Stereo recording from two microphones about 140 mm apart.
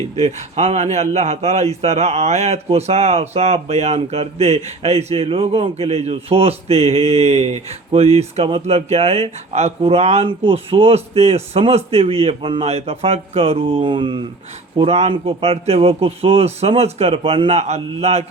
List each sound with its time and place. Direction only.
0.2 s speech: 55° right (ahead or behind); by 14.3 s 35° right (ahead or behind)
14.8 s speech: 45° right (ahead or behind)